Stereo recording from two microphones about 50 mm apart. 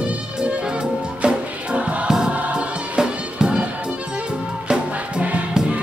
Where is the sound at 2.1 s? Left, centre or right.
Centre.